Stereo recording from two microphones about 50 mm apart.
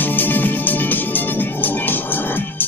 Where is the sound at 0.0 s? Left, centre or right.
Left.